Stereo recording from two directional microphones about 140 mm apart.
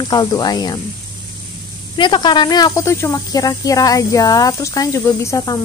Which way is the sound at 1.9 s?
35° left (ahead or behind).